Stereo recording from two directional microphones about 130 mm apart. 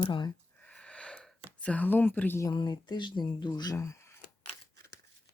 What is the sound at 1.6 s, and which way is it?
Speech, 10° left (ahead or behind).